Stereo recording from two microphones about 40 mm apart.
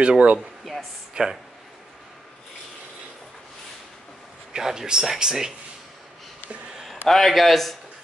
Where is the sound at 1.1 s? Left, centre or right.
Centre.